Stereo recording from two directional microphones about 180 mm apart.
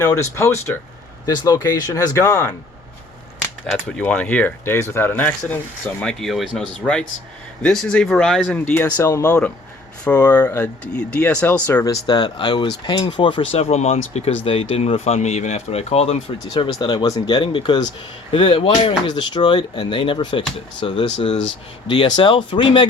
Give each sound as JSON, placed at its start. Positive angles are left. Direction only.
{"t": 0.0, "sound": "speech", "side_deg": 15}
{"t": 3.7, "sound": "speech", "side_deg": 5}
{"t": 12.0, "sound": "speech", "side_deg": 25}
{"t": 16.7, "sound": "speech", "side_deg": 25}